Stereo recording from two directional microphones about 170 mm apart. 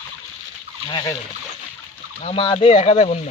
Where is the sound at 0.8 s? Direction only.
25° left (ahead or behind).